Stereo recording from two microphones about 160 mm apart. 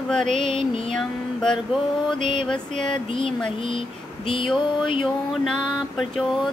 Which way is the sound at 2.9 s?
35° left (ahead or behind).